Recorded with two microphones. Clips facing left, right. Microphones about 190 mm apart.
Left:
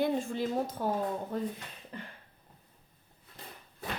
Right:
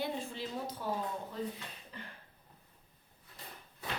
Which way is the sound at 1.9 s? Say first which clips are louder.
Left 7 dB; 50° left (ahead or behind).